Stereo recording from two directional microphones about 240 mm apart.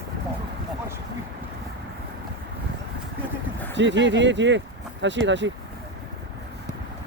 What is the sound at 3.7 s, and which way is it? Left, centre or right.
Speech, right.